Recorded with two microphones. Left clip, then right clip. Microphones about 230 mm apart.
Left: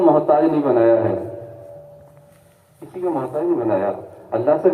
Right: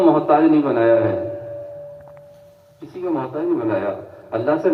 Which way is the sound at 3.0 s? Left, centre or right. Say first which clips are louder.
Left 1 dB; right.